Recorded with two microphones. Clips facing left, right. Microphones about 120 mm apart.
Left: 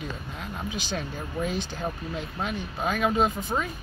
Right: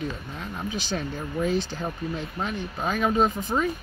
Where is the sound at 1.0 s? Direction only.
5° left (ahead or behind).